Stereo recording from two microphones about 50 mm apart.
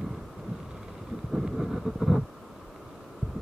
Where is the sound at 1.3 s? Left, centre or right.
Centre.